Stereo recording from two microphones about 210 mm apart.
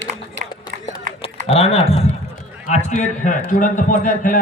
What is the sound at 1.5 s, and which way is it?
Music, 30° left (ahead or behind).